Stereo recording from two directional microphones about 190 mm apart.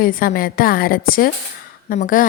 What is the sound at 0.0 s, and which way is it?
A woman's voice, 50° left (ahead or behind).